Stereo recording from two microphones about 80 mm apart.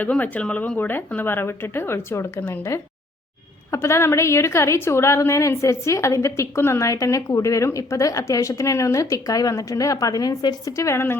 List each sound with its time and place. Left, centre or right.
0.0 s a woman's voice: centre